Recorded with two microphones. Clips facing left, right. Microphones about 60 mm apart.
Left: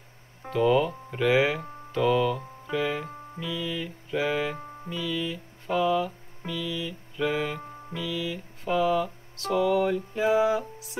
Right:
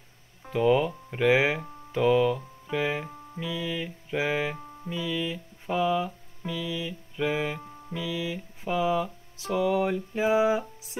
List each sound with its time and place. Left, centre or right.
0.5 s music: centre